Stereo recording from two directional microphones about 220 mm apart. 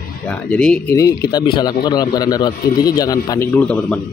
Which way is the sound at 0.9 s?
15° left (ahead or behind).